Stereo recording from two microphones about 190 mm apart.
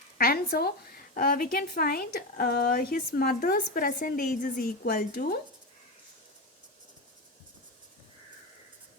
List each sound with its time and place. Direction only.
0.2 s a woman's voice: 50° left (ahead or behind)